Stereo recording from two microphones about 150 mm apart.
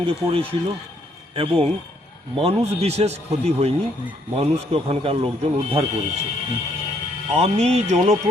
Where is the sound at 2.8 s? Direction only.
45° right (ahead or behind).